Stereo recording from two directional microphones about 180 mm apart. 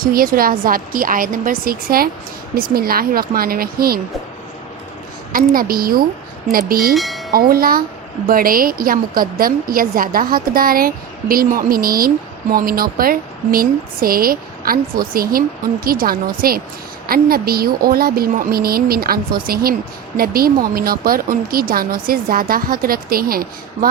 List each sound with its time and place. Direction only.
0.0 s a woman's voice: 55° right (ahead or behind)
5.3 s speech: 55° right (ahead or behind)
6.9 s speech: centre (ahead or behind)
7.3 s a woman's voice: 55° right (ahead or behind)